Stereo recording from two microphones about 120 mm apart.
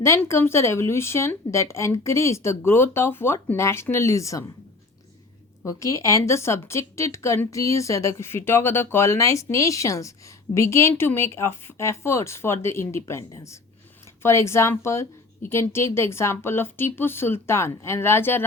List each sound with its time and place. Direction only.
0.0 s speech: 25° left (ahead or behind)
5.6 s speech: 25° left (ahead or behind)